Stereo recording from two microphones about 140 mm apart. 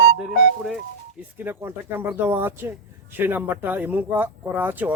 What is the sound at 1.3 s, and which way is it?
Speech, 15° right (ahead or behind).